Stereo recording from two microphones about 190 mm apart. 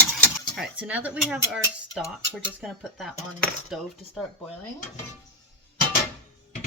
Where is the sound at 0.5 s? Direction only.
5° right (ahead or behind).